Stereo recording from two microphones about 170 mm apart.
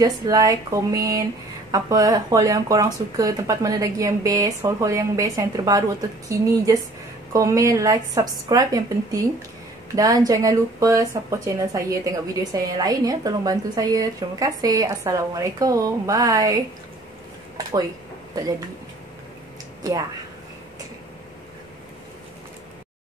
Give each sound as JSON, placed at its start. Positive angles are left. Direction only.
{"t": 0.0, "sound": "speech", "side_deg": -20}